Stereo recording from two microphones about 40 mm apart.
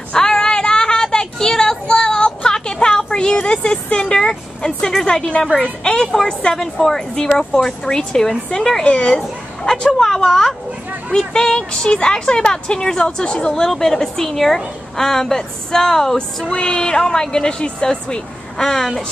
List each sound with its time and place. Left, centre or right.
0.1 s child singing: centre
3.9 s a woman's voice: left
9.9 s a woman's voice: centre
16.4 s speech: centre